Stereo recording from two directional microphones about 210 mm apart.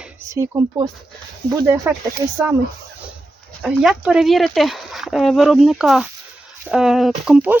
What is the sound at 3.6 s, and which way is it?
Speech, 5° right (ahead or behind).